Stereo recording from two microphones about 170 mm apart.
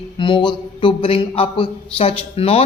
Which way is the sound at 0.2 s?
30° left (ahead or behind).